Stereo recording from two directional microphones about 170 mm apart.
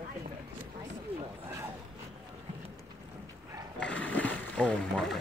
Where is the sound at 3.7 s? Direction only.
5° left (ahead or behind).